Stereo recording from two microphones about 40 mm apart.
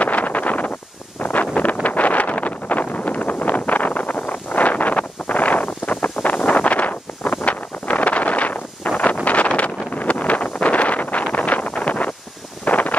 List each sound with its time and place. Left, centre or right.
0.0 s wind noise: left